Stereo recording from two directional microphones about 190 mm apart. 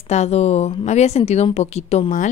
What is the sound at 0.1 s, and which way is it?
A woman's voice, 35° left (ahead or behind).